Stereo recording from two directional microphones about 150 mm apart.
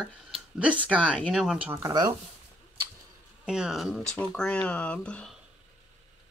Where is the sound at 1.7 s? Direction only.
25° right (ahead or behind).